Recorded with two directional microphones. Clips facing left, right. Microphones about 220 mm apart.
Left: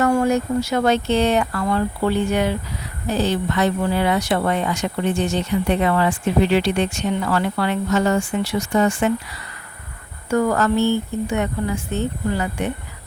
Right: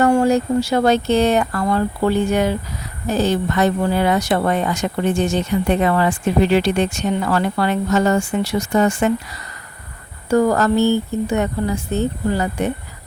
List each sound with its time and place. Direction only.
0.0 s speech: 30° right (ahead or behind)